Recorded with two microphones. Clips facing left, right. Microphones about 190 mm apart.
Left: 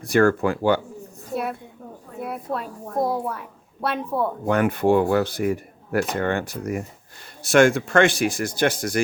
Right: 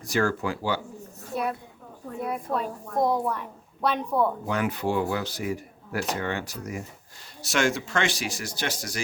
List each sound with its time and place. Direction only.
0.1 s speech: 55° left (ahead or behind)
1.3 s a woman's voice: 5° left (ahead or behind)
4.4 s speech: 55° left (ahead or behind)